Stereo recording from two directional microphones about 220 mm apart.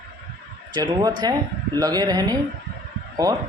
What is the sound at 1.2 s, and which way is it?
A man's voice, 20° right (ahead or behind).